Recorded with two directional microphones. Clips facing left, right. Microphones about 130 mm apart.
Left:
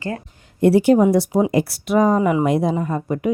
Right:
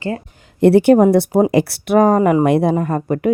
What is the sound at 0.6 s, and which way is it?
Speech, 60° right (ahead or behind).